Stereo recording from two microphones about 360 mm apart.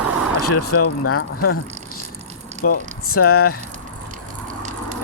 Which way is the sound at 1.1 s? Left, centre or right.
Left.